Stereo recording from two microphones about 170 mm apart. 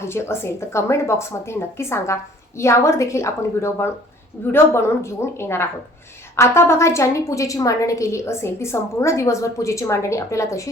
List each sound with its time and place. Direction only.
0.0 s a woman's voice: 15° left (ahead or behind)